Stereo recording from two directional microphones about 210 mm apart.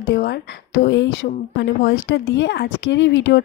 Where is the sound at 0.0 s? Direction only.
55° left (ahead or behind).